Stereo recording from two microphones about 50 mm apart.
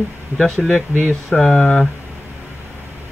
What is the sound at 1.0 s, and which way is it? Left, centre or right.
Speech, centre.